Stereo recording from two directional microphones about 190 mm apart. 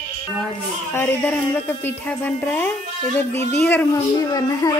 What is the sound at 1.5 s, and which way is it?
Speech, 10° left (ahead or behind).